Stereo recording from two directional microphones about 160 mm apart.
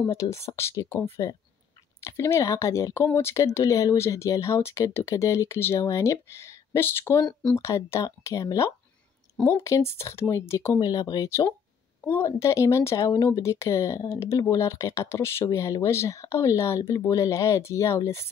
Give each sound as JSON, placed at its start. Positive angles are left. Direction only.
{"t": 0.0, "sound": "speech", "side_deg": 20}